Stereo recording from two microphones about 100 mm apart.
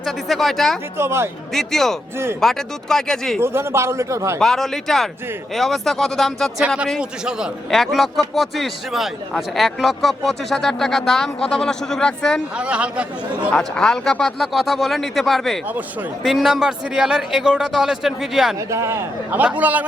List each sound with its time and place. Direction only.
0.0 s speech: centre (ahead or behind)
0.9 s a man's voice: 25° right (ahead or behind)
1.5 s speech: 5° left (ahead or behind)
3.4 s a man's voice: 25° right (ahead or behind)
4.4 s speech: 5° left (ahead or behind)
7.0 s a man's voice: 10° right (ahead or behind)
12.5 s a man's voice: 10° right (ahead or behind)
13.5 s speech: 5° left (ahead or behind)
18.7 s a man's voice: 30° right (ahead or behind)